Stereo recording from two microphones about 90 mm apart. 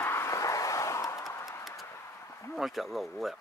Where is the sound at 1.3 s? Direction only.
30° left (ahead or behind).